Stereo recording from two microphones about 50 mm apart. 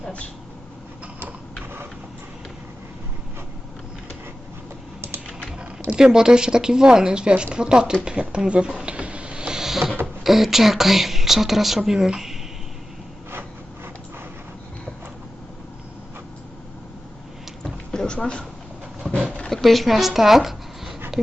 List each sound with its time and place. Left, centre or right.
5.9 s speech: centre
8.0 s a sound: right
10.2 s speech: centre
17.6 s a sound: centre
19.1 s dog: centre
19.5 s speech: centre